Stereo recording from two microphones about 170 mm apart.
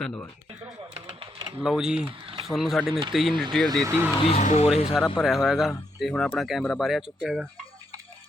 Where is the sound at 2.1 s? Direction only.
30° right (ahead or behind).